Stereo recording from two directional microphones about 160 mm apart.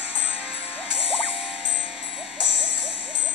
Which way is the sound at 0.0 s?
35° left (ahead or behind).